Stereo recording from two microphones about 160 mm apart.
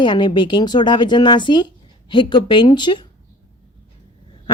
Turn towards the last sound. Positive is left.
turn(degrees=30)  # may be behind; listen again after turning